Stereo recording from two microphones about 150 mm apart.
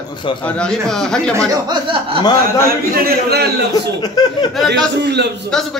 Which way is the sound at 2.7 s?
90° right.